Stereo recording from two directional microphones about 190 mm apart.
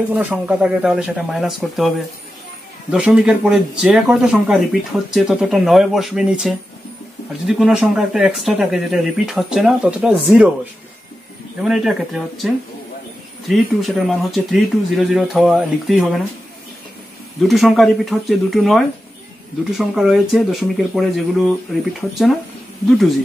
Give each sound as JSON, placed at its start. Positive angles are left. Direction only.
{"t": 0.1, "sound": "speech", "side_deg": -5}
{"t": 2.9, "sound": "speech", "side_deg": -5}
{"t": 11.6, "sound": "speech", "side_deg": -5}
{"t": 17.4, "sound": "speech", "side_deg": 0}